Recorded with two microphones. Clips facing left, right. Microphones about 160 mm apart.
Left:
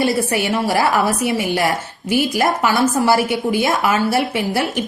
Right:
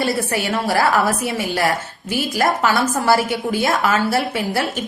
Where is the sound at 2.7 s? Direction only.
20° left (ahead or behind).